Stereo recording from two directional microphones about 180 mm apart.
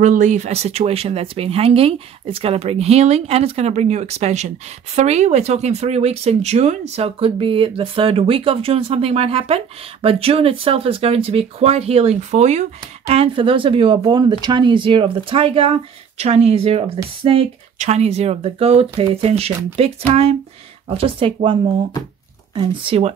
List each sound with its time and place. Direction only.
0.0 s speech: 45° right (ahead or behind)